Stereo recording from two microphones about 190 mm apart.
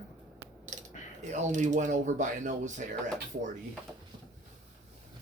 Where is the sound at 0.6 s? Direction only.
40° right (ahead or behind).